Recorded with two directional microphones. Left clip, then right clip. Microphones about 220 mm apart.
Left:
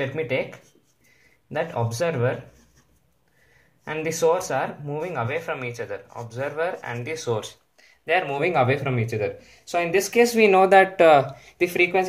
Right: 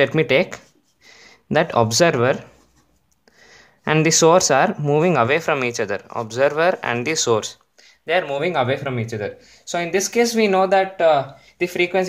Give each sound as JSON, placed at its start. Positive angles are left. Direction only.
{"t": 0.0, "sound": "speech", "side_deg": -50}
{"t": 3.8, "sound": "speech", "side_deg": -50}
{"t": 8.0, "sound": "speech", "side_deg": -20}
{"t": 10.7, "sound": "speech", "side_deg": 15}
{"t": 11.5, "sound": "speech", "side_deg": -10}